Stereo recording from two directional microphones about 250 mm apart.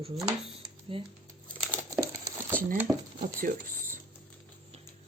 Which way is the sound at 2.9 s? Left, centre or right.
Centre.